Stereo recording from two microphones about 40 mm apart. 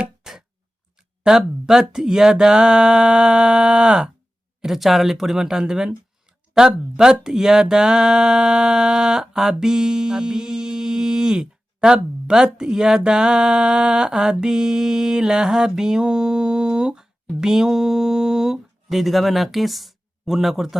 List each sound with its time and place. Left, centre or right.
0.0 s a sound: centre
1.2 s mantra: centre
4.6 s speech: centre
13.0 s mantra: centre
17.4 s speech: centre